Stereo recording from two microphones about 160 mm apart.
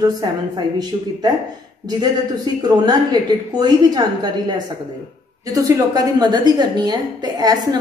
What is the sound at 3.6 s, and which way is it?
Speech, 25° right (ahead or behind).